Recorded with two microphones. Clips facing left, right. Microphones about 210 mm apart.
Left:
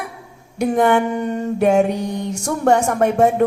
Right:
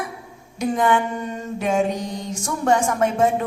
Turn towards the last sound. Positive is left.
turn(degrees=65)  # may be behind; listen again after turning